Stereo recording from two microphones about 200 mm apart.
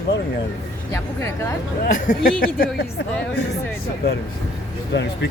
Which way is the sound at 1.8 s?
45° left (ahead or behind).